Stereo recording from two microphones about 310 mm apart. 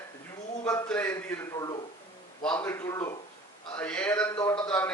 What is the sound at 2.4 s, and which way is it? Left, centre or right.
A man's voice, centre.